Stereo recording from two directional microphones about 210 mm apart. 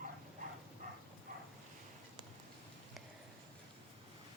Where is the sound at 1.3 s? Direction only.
40° right (ahead or behind).